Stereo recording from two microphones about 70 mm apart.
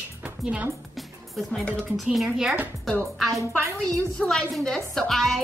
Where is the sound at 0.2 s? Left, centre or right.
Centre.